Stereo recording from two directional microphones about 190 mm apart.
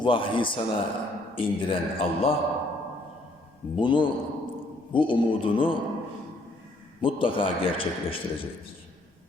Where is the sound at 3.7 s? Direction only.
25° left (ahead or behind).